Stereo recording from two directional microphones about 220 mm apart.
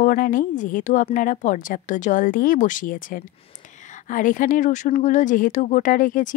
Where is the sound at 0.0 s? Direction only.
40° left (ahead or behind).